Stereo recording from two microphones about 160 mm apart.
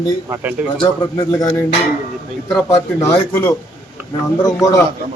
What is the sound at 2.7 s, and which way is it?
A man's voice, 20° left (ahead or behind).